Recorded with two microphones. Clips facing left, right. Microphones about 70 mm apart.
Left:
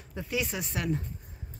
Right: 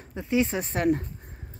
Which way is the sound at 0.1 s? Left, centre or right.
Right.